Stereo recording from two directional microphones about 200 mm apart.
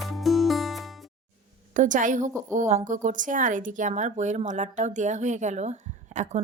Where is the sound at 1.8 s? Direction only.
40° right (ahead or behind).